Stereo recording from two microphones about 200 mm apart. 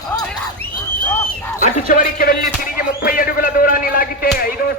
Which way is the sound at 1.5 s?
40° left (ahead or behind).